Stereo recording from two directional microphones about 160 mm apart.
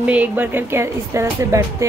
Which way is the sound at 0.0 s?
10° right (ahead or behind).